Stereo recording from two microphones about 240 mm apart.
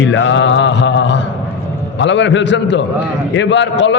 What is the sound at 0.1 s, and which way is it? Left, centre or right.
Mantra, left.